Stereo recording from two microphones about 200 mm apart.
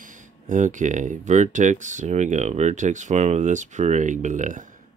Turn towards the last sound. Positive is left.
turn(degrees=-40)  # may be behind; listen again after turning